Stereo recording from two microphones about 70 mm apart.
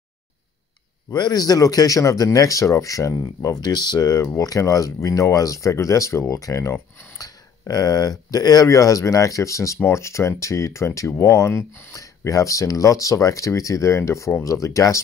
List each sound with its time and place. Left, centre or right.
1.1 s speech: left
3.6 s speech: left
4.4 s speech: left
6.7 s speech: left
7.2 s speech: left